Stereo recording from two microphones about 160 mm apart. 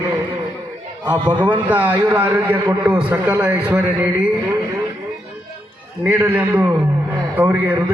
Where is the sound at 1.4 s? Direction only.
10° right (ahead or behind).